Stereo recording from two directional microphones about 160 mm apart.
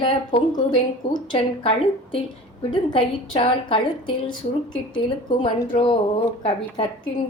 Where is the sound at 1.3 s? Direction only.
30° left (ahead or behind).